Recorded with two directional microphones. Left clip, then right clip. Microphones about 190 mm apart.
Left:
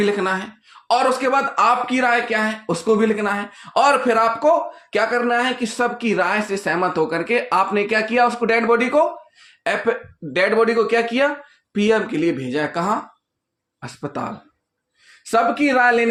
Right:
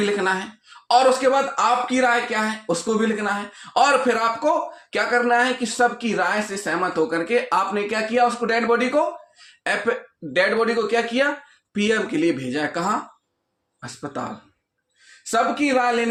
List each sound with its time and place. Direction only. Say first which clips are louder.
0.0 s speech: left 2 dB; 25° left (ahead or behind)
11.7 s speech: left 3 dB; 25° left (ahead or behind)
13.8 s speech: left 3 dB; 45° left (ahead or behind)